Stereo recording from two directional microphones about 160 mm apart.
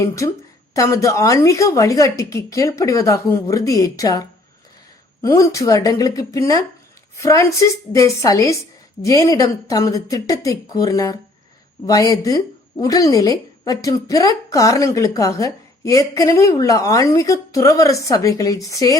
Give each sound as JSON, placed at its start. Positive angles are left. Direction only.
{"t": 0.7, "sound": "a woman's voice", "side_deg": 20}